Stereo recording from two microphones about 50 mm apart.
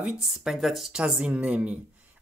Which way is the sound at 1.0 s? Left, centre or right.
Right.